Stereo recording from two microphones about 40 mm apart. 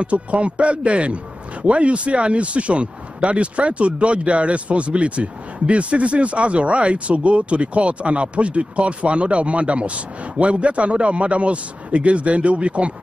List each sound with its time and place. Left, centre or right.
0.0 s a man's voice: right